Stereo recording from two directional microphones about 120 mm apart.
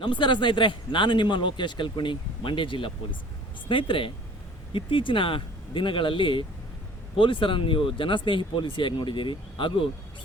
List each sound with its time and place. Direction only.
0.0 s a man's voice: 40° left (ahead or behind)